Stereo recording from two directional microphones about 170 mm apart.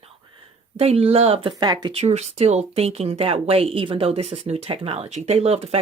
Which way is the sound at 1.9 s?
40° right (ahead or behind).